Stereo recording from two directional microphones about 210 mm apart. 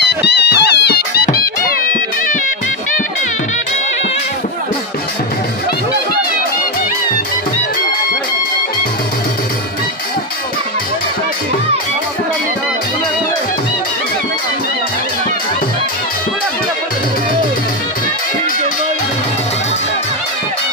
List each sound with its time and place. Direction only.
0.0 s music: 55° left (ahead or behind)